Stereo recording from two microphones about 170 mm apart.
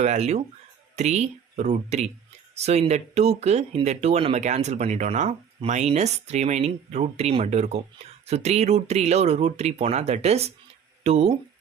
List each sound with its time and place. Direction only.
0.0 s speech: 40° right (ahead or behind)